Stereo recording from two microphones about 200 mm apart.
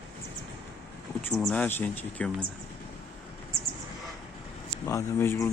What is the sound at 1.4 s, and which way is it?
Speech, 5° left (ahead or behind).